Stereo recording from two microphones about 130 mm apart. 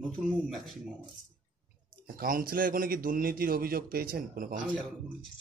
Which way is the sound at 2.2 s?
90° right.